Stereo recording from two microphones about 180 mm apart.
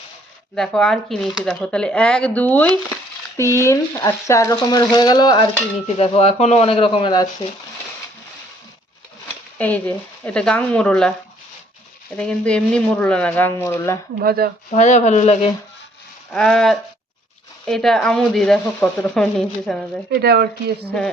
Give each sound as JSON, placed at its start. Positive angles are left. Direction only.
{"t": 0.5, "sound": "speech", "side_deg": 5}
{"t": 6.0, "sound": "speech", "side_deg": 35}
{"t": 9.6, "sound": "speech", "side_deg": 10}
{"t": 12.1, "sound": "speech", "side_deg": 5}
{"t": 14.2, "sound": "speech", "side_deg": -60}
{"t": 14.7, "sound": "speech", "side_deg": 40}
{"t": 16.3, "sound": "speech", "side_deg": 5}
{"t": 20.1, "sound": "speech", "side_deg": -65}